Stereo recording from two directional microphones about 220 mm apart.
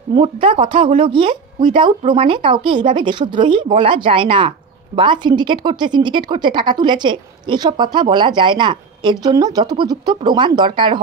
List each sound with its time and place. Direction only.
0.1 s speech: 20° right (ahead or behind)